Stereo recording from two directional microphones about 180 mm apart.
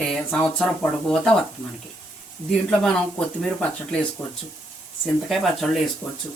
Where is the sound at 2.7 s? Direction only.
5° left (ahead or behind).